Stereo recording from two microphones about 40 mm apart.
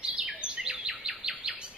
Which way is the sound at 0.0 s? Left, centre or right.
Right.